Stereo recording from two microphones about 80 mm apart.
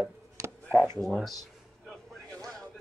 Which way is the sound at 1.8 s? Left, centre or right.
Centre.